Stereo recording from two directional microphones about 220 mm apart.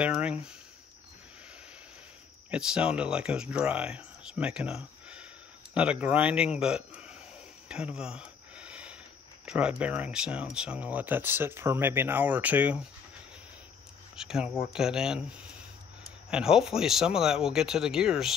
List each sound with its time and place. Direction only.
0.0 s speech: 5° right (ahead or behind)
2.5 s speech: 5° right (ahead or behind)
7.6 s a sound: 5° right (ahead or behind)
9.5 s speech: 5° right (ahead or behind)
14.1 s speech: 5° right (ahead or behind)
16.3 s speech: 5° right (ahead or behind)